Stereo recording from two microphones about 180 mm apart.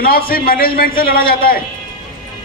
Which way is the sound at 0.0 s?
55° left (ahead or behind).